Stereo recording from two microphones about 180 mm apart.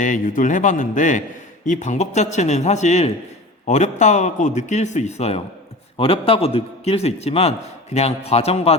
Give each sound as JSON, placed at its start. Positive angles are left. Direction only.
{"t": 0.0, "sound": "a man's voice", "side_deg": 45}